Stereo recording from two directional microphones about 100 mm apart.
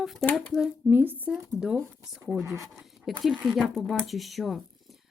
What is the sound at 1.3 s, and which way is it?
Speech, 5° right (ahead or behind).